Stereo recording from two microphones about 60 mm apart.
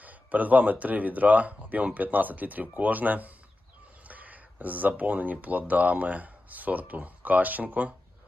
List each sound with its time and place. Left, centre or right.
0.0 s speech: right